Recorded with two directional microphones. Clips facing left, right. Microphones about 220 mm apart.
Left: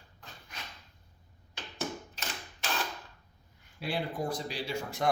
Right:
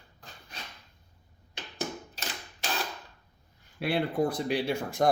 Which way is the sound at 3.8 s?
65° right (ahead or behind).